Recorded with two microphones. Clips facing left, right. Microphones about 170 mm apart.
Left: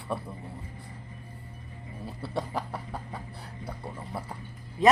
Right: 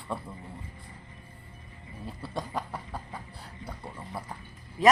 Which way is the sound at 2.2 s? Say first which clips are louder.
Left 2 dB; 25° left (ahead or behind).